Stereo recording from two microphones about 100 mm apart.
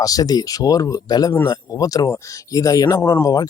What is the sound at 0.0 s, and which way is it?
A man's voice, 40° left (ahead or behind).